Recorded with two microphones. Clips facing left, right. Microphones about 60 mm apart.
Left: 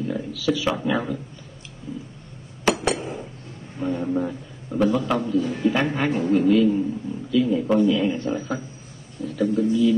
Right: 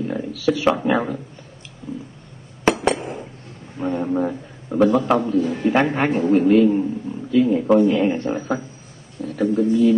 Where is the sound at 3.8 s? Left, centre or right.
Right.